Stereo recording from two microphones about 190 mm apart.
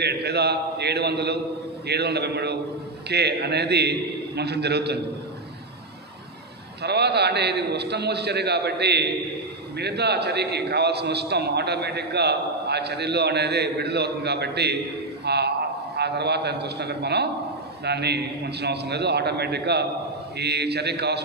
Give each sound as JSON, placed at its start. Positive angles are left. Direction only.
{"t": 0.0, "sound": "a man's voice", "side_deg": -60}
{"t": 6.8, "sound": "a man's voice", "side_deg": -60}
{"t": 15.2, "sound": "a sound", "side_deg": -60}
{"t": 16.0, "sound": "a man's voice", "side_deg": -60}